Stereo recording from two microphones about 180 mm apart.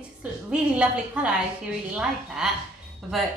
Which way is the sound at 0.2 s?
5° right (ahead or behind).